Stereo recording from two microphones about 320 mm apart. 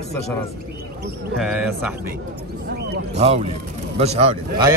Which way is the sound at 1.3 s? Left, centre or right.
Centre.